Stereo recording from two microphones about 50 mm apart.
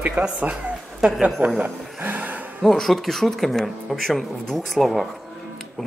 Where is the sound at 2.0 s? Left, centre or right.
Right.